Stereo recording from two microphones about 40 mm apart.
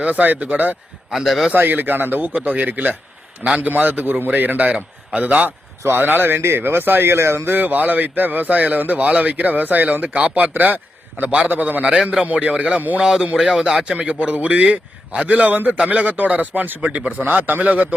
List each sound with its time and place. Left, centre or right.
0.0 s speech: right
1.1 s a man's voice: centre
1.5 s speech: right
4.3 s a man's voice: right
5.5 s a man's voice: right
13.0 s a man's voice: centre; by 17.6 s right
17.6 s a man's voice: right